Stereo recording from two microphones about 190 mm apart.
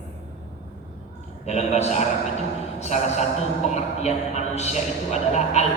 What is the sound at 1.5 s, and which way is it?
Speech, 35° left (ahead or behind).